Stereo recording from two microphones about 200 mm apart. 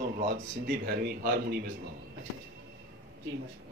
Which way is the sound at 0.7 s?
50° right (ahead or behind).